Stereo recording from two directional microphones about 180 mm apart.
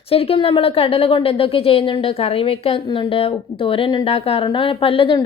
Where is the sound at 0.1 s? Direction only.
30° left (ahead or behind).